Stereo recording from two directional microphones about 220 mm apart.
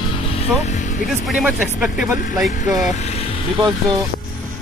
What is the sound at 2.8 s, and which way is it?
Speech, 30° left (ahead or behind).